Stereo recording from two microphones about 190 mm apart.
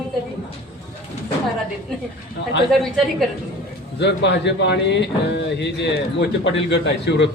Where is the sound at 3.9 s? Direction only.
65° left (ahead or behind).